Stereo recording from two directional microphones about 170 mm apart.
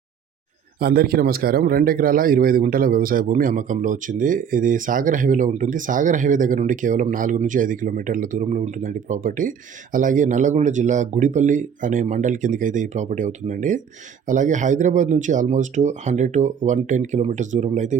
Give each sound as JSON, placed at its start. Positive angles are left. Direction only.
{"t": 0.8, "sound": "a man's voice", "side_deg": -65}